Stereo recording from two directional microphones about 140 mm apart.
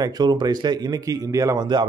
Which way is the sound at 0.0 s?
30° right (ahead or behind).